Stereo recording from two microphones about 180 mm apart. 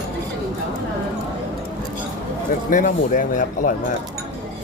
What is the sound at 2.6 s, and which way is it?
Speech, 45° left (ahead or behind).